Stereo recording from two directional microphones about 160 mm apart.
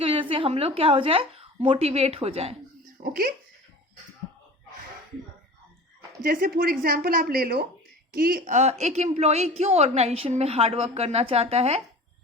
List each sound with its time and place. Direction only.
0.0 s a woman's voice: 35° right (ahead or behind)
3.0 s a woman's voice: 65° right (ahead or behind)
6.2 s a woman's voice: 65° right (ahead or behind)
8.1 s a woman's voice: 65° right (ahead or behind); by 11.8 s 40° right (ahead or behind)